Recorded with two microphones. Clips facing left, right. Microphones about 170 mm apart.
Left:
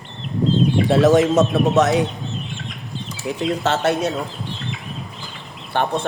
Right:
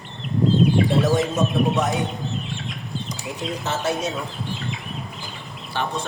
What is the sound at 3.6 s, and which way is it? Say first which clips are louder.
Speech: left 4 dB; 70° left (ahead or behind).